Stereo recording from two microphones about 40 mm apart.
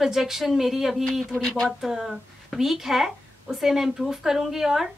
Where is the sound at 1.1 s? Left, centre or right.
Centre.